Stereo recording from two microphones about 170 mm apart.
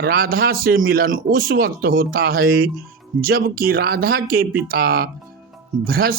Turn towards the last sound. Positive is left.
turn(degrees=-60)  # may be behind; listen again after turning